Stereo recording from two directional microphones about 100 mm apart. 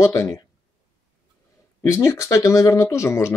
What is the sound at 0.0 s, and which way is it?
Speech, 30° left (ahead or behind).